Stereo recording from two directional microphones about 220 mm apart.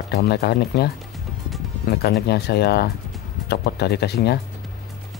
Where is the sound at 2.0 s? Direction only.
50° left (ahead or behind).